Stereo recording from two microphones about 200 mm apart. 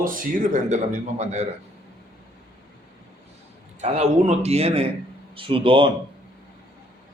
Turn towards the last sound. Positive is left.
turn(degrees=-25)  # may be behind; listen again after turning